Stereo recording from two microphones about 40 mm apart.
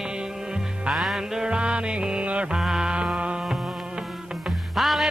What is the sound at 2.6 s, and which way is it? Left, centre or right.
Music, centre.